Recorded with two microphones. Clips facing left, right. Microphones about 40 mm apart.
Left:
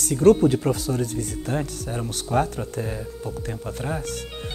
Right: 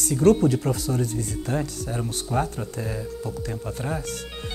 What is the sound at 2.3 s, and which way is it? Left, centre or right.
Speech, left.